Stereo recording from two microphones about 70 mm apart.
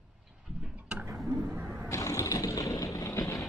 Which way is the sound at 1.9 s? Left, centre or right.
Left.